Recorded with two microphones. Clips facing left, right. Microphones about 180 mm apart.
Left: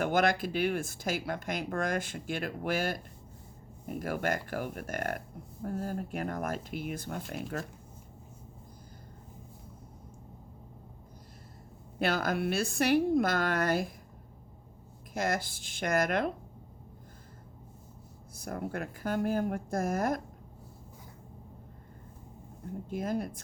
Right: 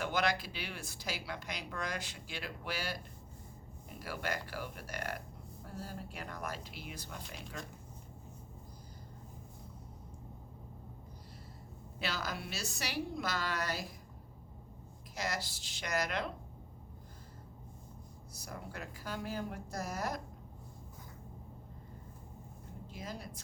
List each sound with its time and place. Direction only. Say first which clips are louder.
0.0 s speech: left 7 dB; 50° left (ahead or behind)
11.9 s speech: left 10 dB; 55° left (ahead or behind)
15.1 s speech: left 7 dB; 50° left (ahead or behind)
18.3 s speech: left 10 dB; 55° left (ahead or behind)
22.9 s speech: left 13 dB; 55° left (ahead or behind)